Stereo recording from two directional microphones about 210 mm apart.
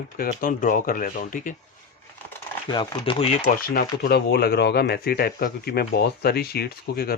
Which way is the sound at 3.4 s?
50° left (ahead or behind).